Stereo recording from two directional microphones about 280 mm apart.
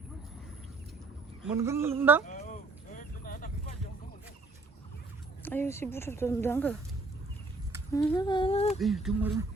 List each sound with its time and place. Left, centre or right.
1.4 s speech: centre
2.2 s a sound: left
2.9 s vehicle: left
5.4 s speech: centre
7.9 s speech: centre
8.8 s speech: centre